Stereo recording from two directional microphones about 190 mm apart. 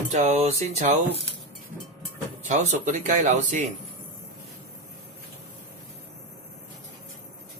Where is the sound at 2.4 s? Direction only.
40° right (ahead or behind).